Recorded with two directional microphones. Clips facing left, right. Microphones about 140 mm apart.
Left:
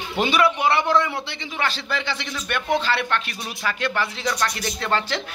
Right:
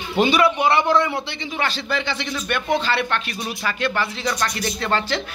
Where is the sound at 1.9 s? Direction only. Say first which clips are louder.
Right 3 dB; 15° right (ahead or behind).